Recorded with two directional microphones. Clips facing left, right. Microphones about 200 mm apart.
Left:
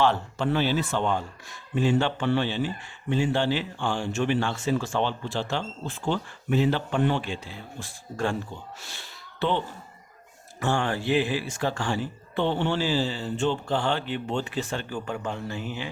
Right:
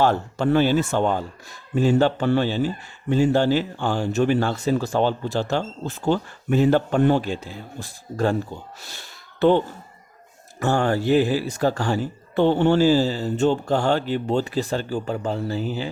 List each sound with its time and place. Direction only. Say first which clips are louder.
0.0 s a man's voice: right 4 dB; 45° right (ahead or behind)